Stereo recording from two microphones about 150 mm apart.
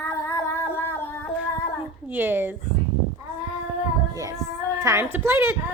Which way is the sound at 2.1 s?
15° right (ahead or behind).